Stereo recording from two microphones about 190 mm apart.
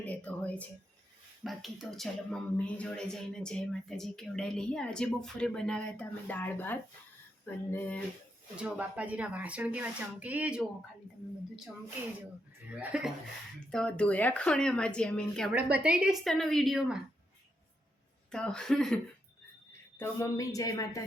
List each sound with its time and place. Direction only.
0.0 s speech: 10° left (ahead or behind)
8.5 s speech: 5° right (ahead or behind)
12.7 s speech: 5° right (ahead or behind)
15.8 s speech: 5° right (ahead or behind)
18.3 s speech: 5° left (ahead or behind)
20.0 s speech: 15° left (ahead or behind)